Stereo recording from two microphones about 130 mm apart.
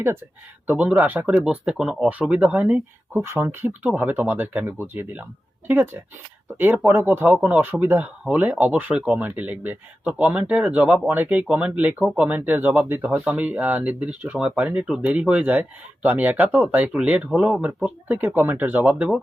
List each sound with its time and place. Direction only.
0.7 s speech: 10° right (ahead or behind)